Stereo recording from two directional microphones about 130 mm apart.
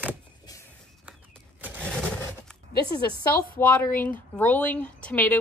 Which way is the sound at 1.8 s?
5° left (ahead or behind).